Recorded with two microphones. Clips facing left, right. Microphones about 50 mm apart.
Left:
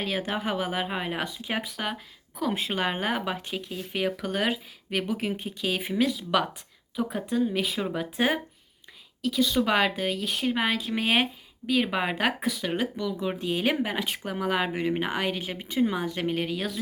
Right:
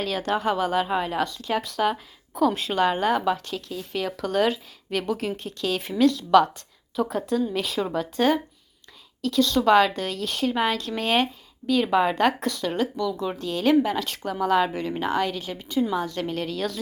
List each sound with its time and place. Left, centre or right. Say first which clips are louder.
0.0 s speech: right 4 dB; centre
1.7 s speech: right 8 dB; centre
2.5 s speech: right 5 dB; left